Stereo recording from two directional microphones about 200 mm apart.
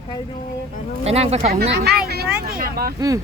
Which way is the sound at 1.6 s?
55° right (ahead or behind).